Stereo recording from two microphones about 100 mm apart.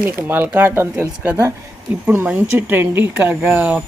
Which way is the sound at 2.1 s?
15° right (ahead or behind).